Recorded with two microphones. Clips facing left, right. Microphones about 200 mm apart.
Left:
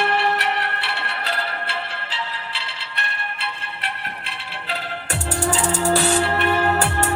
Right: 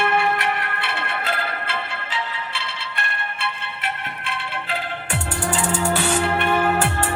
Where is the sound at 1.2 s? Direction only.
50° right (ahead or behind).